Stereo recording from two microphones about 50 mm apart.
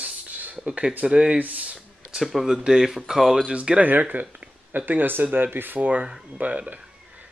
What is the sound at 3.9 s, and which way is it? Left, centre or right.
Speech, right.